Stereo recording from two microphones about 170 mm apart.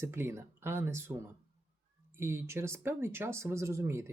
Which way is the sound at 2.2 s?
15° right (ahead or behind).